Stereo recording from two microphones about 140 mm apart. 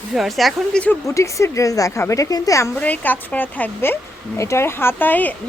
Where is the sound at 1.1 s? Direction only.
20° left (ahead or behind).